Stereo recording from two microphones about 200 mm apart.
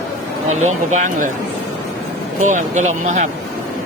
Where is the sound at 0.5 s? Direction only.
35° right (ahead or behind).